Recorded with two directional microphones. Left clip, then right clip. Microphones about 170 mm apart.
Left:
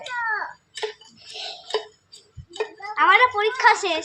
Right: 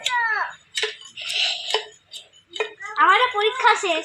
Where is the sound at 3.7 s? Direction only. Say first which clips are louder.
Right 1 dB; 10° left (ahead or behind).